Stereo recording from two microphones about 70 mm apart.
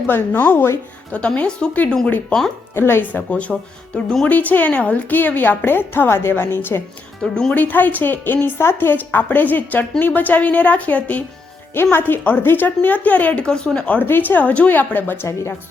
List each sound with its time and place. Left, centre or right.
0.1 s speech: left
1.1 s speech: centre
2.7 s a woman's voice: left; by 4.3 s centre
4.3 s a woman's voice: left
7.2 s speech: centre
7.5 s a woman's voice: left